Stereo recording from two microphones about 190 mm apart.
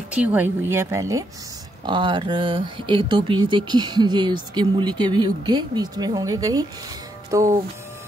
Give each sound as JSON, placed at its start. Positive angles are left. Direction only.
{"t": 0.1, "sound": "speech", "side_deg": -5}